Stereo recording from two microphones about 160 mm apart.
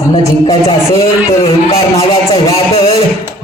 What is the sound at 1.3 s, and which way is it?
Speech, 35° left (ahead or behind).